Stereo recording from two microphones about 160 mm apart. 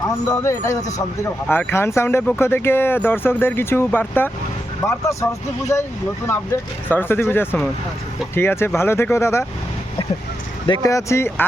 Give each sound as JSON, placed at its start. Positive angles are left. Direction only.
{"t": 0.3, "sound": "speech", "side_deg": 20}
{"t": 6.8, "sound": "speech", "side_deg": 10}
{"t": 10.7, "sound": "speech", "side_deg": 20}